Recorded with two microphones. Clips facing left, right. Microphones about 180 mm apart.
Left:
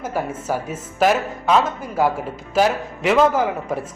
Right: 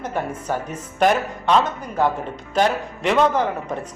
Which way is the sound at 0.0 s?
5° left (ahead or behind).